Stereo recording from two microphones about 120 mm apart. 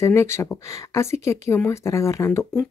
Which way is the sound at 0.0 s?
20° left (ahead or behind).